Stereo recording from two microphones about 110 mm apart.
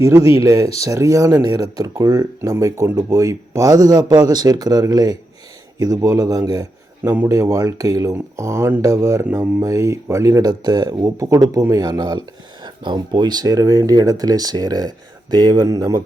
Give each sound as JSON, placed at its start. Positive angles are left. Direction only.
{"t": 0.0, "sound": "speech", "side_deg": -25}